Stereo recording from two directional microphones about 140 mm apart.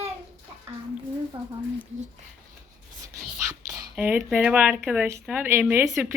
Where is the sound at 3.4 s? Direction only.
25° right (ahead or behind).